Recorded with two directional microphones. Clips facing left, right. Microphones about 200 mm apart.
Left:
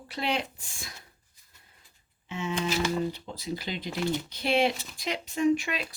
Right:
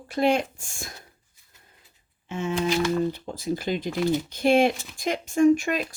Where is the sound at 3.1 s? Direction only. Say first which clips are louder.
Right 6 dB; 50° right (ahead or behind).